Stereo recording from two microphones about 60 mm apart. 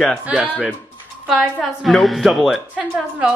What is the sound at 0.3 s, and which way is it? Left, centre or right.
Speech, centre.